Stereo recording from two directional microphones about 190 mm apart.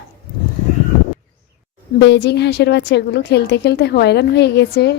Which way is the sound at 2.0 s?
65° left (ahead or behind).